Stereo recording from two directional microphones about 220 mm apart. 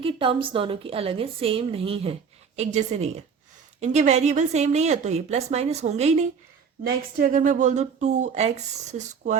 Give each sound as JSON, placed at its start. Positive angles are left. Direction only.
{"t": 0.0, "sound": "a woman's voice", "side_deg": -25}